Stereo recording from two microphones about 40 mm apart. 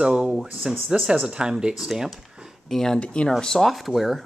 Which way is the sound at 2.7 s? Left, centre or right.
Centre.